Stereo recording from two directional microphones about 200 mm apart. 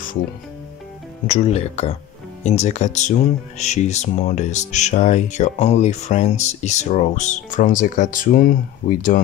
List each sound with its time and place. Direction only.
1.2 s speech: 30° left (ahead or behind)